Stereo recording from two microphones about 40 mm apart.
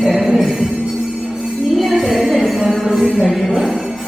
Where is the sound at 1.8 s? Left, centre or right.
Centre.